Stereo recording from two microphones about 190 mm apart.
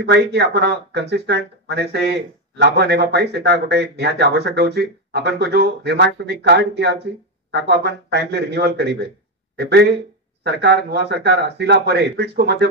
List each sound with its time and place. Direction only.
0.0 s speech: 60° right (ahead or behind)